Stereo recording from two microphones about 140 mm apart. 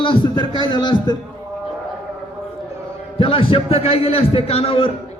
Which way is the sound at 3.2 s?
40° left (ahead or behind).